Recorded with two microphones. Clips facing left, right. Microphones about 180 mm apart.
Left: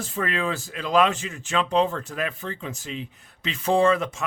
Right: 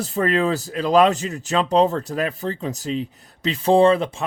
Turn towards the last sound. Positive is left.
turn(degrees=-30)  # may be behind; listen again after turning